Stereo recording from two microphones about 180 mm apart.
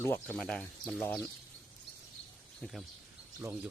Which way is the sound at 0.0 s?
10° left (ahead or behind).